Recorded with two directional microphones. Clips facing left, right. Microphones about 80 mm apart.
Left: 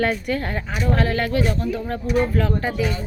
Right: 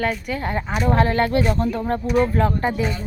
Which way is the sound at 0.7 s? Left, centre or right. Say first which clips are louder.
Right 3 dB; right.